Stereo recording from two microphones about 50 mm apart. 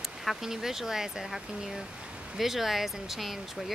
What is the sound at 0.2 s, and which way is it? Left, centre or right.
Speech, centre.